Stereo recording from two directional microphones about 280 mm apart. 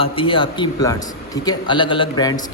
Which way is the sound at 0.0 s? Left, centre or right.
Centre.